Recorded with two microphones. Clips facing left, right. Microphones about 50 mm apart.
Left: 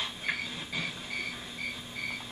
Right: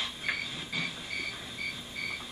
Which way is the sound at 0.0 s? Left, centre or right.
Centre.